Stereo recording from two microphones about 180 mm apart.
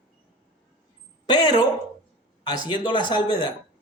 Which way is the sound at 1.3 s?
25° left (ahead or behind).